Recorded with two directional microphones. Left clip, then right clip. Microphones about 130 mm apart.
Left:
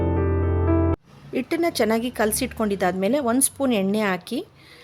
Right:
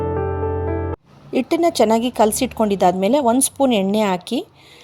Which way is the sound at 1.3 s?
25° right (ahead or behind).